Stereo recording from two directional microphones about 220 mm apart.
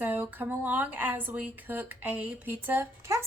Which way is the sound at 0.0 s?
10° right (ahead or behind).